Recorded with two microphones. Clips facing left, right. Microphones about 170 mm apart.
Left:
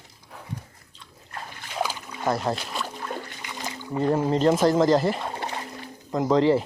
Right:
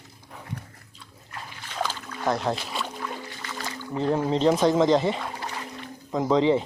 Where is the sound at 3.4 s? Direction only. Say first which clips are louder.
Even; 15° left (ahead or behind).